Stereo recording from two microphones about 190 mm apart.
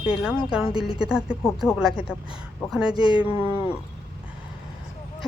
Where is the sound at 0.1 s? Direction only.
5° right (ahead or behind).